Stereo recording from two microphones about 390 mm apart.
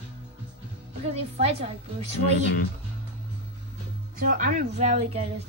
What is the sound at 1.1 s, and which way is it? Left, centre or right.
Speech, centre.